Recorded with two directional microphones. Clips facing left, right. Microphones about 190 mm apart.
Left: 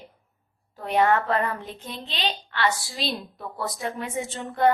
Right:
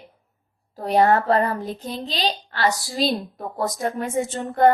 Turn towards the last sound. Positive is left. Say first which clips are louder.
# right 5 dB
turn(degrees=-45)  # may be behind; listen again after turning